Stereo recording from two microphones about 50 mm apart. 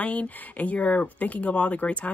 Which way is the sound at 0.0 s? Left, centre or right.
Left.